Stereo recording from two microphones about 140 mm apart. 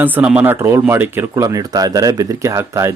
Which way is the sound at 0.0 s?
10° right (ahead or behind).